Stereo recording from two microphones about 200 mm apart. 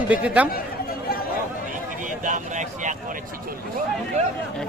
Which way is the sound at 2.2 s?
40° right (ahead or behind).